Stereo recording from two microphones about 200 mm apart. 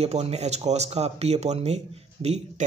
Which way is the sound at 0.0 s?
30° right (ahead or behind).